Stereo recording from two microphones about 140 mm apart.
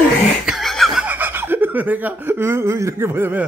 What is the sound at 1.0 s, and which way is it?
Speech, 15° right (ahead or behind).